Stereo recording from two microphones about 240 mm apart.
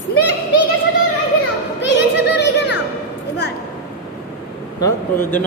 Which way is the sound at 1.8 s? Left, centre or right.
Left.